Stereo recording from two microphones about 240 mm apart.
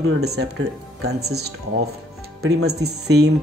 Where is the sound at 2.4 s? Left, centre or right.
Right.